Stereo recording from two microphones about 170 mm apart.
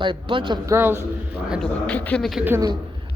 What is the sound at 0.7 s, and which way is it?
Speech, 10° right (ahead or behind).